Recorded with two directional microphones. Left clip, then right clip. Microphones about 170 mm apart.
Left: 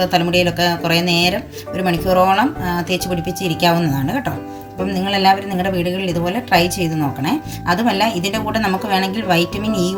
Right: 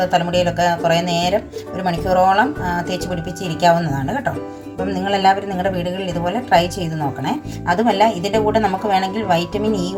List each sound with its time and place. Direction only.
0.0 s a woman's voice: 40° right (ahead or behind)